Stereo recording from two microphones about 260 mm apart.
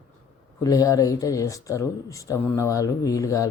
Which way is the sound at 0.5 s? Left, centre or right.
Centre.